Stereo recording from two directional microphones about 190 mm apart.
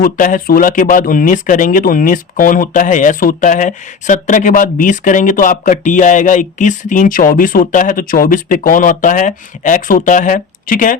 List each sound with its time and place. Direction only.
0.0 s speech: 45° left (ahead or behind)